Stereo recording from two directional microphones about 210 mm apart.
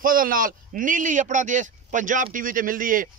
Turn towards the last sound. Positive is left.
turn(degrees=-40)  # may be behind; listen again after turning